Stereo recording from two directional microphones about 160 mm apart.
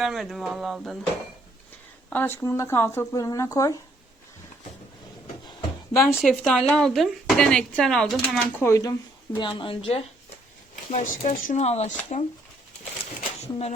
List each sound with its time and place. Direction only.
0.0 s speech: centre (ahead or behind)
2.0 s speech: 10° left (ahead or behind)
6.0 s speech: centre (ahead or behind)
9.3 s speech: 30° left (ahead or behind)
10.9 s speech: 55° left (ahead or behind)
13.4 s speech: 40° left (ahead or behind)